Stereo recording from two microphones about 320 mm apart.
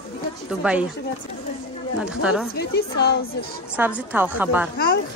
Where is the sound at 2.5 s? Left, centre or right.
Left.